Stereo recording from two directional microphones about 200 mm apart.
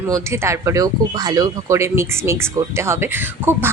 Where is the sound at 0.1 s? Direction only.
15° right (ahead or behind).